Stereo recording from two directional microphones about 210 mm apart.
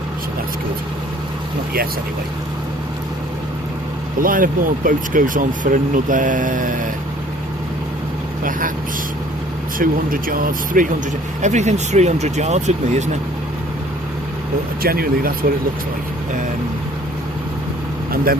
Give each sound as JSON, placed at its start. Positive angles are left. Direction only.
{"t": 4.2, "sound": "speech", "side_deg": -40}
{"t": 8.4, "sound": "speech", "side_deg": -40}
{"t": 9.7, "sound": "speech", "side_deg": -40}
{"t": 14.8, "sound": "speech", "side_deg": -45}